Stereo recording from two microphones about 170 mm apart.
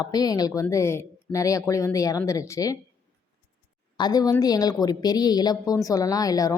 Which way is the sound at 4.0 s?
25° left (ahead or behind).